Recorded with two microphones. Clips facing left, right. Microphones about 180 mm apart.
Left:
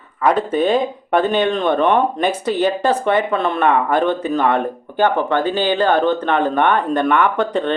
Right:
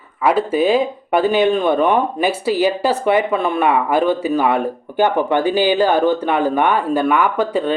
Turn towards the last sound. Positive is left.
turn(degrees=-5)  # may be behind; listen again after turning